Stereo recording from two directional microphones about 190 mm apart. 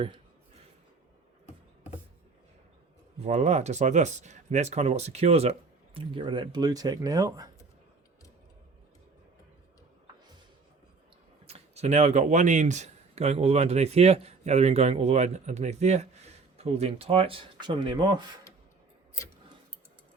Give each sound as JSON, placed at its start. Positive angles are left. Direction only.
{"t": 3.2, "sound": "speech", "side_deg": -35}
{"t": 11.4, "sound": "speech", "side_deg": -35}